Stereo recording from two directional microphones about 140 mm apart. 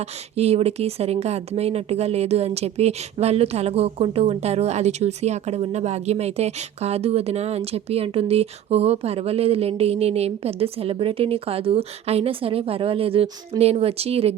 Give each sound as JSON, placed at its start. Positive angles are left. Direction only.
{"t": 0.3, "sound": "speech", "side_deg": -50}